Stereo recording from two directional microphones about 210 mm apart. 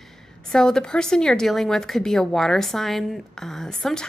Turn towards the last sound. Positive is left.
turn(degrees=0)  # may be behind; listen again after turning